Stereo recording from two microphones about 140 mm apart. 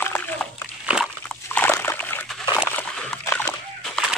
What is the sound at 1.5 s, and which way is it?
Slosh, 15° left (ahead or behind).